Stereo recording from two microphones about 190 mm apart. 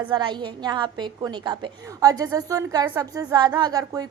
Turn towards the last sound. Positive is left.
turn(degrees=-20)  # may be behind; listen again after turning